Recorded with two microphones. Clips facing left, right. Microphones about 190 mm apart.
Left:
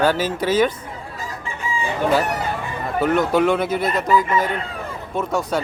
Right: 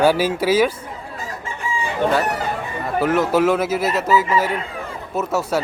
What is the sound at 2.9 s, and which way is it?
Speech, centre (ahead or behind).